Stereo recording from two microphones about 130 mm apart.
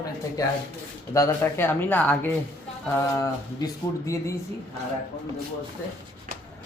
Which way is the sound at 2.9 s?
25° left (ahead or behind).